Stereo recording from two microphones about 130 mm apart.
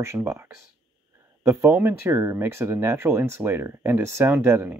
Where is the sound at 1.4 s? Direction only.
15° right (ahead or behind).